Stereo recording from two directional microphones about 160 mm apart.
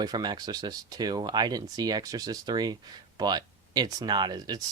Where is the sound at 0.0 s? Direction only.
25° right (ahead or behind).